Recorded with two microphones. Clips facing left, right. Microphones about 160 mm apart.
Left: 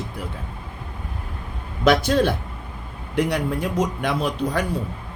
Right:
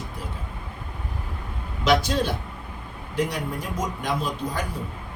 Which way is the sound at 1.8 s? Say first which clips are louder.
Left 4 dB; 55° left (ahead or behind).